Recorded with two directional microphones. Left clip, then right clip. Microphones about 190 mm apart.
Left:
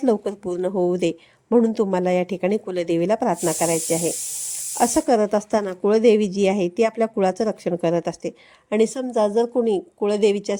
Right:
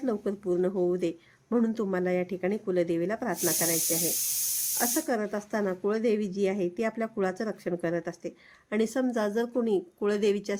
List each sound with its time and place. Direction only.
0.0 s speech: 35° left (ahead or behind)
4.8 s a woman's voice: 35° left (ahead or behind)